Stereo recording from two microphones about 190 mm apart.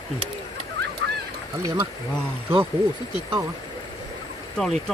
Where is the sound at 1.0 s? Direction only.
70° right (ahead or behind).